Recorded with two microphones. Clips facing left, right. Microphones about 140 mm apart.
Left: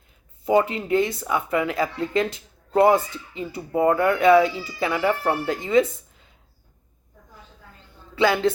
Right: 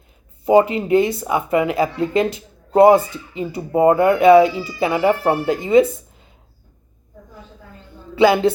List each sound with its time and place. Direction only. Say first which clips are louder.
0.4 s speech: right 6 dB; 15° right (ahead or behind)
3.6 s speech: right 6 dB; 25° right (ahead or behind)
8.1 s speech: right 6 dB; 10° right (ahead or behind)